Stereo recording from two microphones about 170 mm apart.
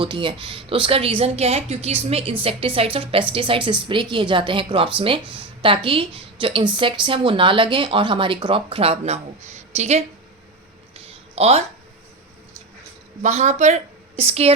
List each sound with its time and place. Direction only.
0.0 s speech: 30° right (ahead or behind)
10.9 s a sound: 40° right (ahead or behind)
13.2 s a woman's voice: 45° right (ahead or behind)